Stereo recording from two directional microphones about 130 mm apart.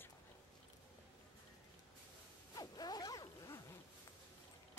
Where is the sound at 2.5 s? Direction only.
30° left (ahead or behind).